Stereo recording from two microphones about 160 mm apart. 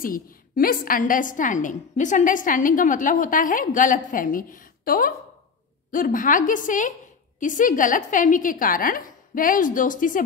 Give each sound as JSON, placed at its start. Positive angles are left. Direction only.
{"t": 0.0, "sound": "a woman's voice", "side_deg": 60}